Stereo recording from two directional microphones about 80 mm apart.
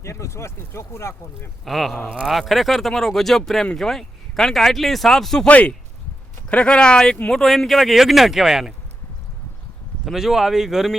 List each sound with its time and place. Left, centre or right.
0.0 s speech: left
1.6 s speech: centre
2.0 s speech: centre
2.3 s speech: centre
5.5 s speech: centre
10.1 s speech: centre